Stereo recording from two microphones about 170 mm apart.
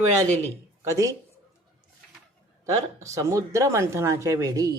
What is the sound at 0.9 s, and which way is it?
Speech, 20° right (ahead or behind).